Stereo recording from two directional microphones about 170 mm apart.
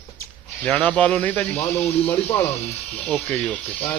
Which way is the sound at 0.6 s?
10° left (ahead or behind).